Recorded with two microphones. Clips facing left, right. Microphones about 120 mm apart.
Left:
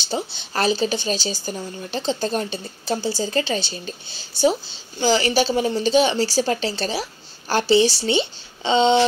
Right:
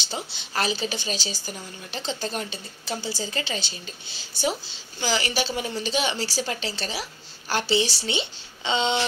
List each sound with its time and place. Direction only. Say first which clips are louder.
0.5 s a woman's voice: left 6 dB; 40° left (ahead or behind)
5.0 s a woman's voice: left 8 dB; 35° left (ahead or behind)